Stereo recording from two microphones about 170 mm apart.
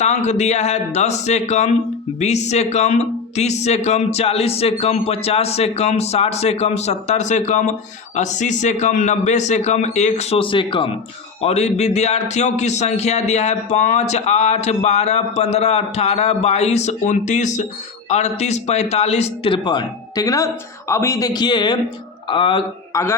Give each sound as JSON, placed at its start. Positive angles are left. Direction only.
{"t": 0.0, "sound": "speech", "side_deg": 40}
{"t": 22.9, "sound": "a man's voice", "side_deg": 20}